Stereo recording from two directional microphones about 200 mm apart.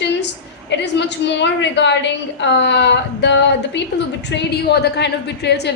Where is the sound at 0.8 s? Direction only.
60° left (ahead or behind).